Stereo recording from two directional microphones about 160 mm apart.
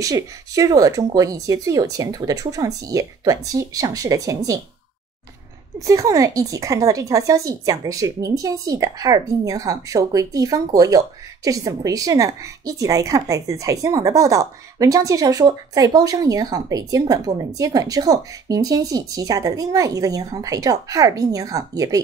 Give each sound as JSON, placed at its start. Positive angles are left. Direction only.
{"t": 0.0, "sound": "a woman's voice", "side_deg": -20}
{"t": 5.8, "sound": "a woman's voice", "side_deg": -20}